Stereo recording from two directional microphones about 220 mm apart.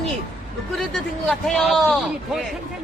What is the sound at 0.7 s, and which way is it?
A man's voice, centre (ahead or behind).